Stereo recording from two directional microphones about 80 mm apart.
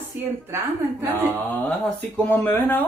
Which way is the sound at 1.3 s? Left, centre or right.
Centre.